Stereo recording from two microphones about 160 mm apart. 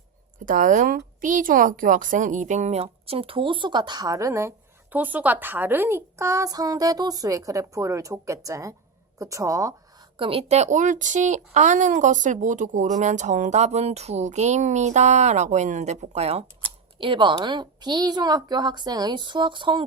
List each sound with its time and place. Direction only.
0.4 s speech: 55° right (ahead or behind); by 9.7 s 20° right (ahead or behind)
10.2 s speech: 35° right (ahead or behind)
17.0 s speech: 30° right (ahead or behind)